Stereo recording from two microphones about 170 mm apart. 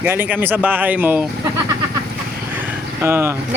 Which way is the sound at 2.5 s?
10° right (ahead or behind).